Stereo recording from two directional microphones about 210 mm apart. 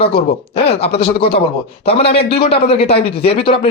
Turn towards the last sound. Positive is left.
turn(degrees=25)  # may be behind; listen again after turning